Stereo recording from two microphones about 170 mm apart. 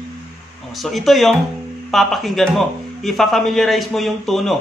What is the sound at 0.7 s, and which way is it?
A man's voice, centre (ahead or behind).